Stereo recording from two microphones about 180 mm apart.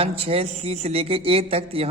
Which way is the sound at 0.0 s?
30° right (ahead or behind).